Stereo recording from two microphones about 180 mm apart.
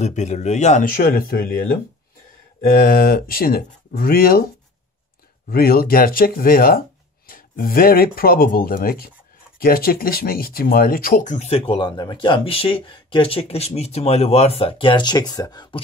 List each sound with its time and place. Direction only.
0.0 s speech: 40° left (ahead or behind); by 1.5 s 55° left (ahead or behind)
2.7 s speech: 55° left (ahead or behind)
5.5 s speech: 55° left (ahead or behind); by 15.8 s 25° left (ahead or behind)